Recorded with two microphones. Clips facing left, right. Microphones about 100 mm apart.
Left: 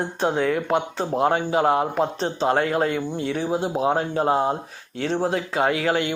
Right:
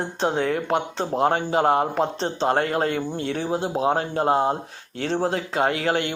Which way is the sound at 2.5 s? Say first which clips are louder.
Left 1 dB; 45° right (ahead or behind).